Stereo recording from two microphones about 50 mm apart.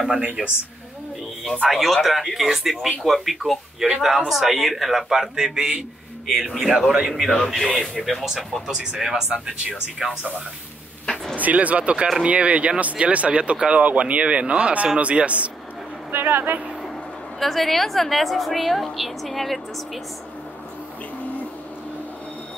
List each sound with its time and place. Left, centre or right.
0.1 s speech: centre
1.4 s speech: centre
1.7 s a woman's voice: centre
6.2 s a woman's voice: centre
8.6 s speech: centre
11.3 s speech: right
16.1 s speech: right
17.4 s a woman's voice: centre
21.2 s a sound: left